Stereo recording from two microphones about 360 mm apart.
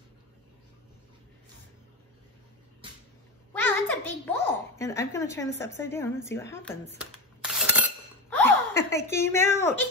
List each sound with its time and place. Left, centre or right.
3.5 s a child's voice: centre
7.4 s chink: centre
8.5 s a sound: right
8.7 s a woman's voice: centre